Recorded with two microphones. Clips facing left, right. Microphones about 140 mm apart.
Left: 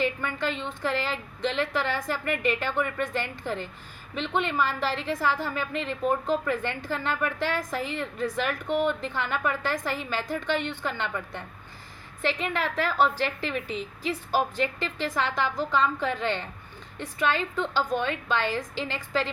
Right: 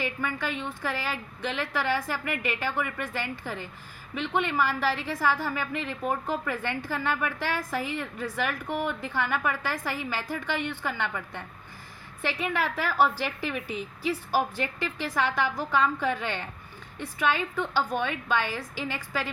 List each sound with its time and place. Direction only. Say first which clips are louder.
0.0 s a woman's voice: left 3 dB; 10° right (ahead or behind)
8.7 s a woman's voice: left 8 dB; 20° left (ahead or behind)
9.0 s a woman's voice: even; 10° right (ahead or behind)